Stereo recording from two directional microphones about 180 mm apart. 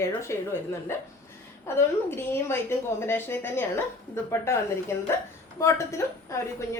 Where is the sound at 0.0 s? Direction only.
15° left (ahead or behind).